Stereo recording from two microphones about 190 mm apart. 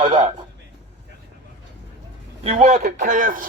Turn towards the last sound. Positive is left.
turn(degrees=-45)  # may be behind; listen again after turning